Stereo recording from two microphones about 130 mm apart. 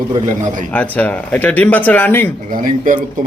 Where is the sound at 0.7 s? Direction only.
10° left (ahead or behind).